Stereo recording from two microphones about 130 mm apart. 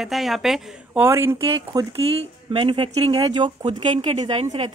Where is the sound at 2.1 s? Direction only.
40° right (ahead or behind).